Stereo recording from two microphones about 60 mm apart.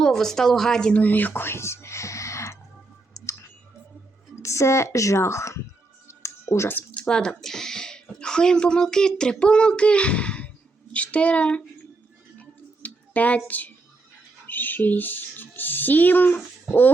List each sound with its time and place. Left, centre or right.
0.0 s speech: centre
0.9 s speech: left
3.2 s clicking: left
4.4 s a woman's voice: left
6.1 s music: left
7.0 s speech: centre
12.4 s a sound: left
14.4 s music: left